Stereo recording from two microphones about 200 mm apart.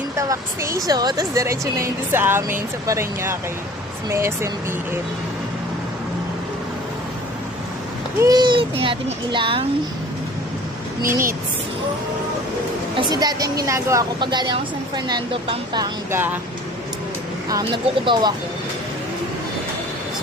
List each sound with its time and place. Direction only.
0.2 s a woman's voice: 15° right (ahead or behind)
8.2 s speech: 20° right (ahead or behind)
11.1 s a woman's voice: 15° right (ahead or behind)
12.9 s speech: 20° right (ahead or behind)
15.7 s a woman's voice: 15° right (ahead or behind)
17.5 s speech: 20° right (ahead or behind)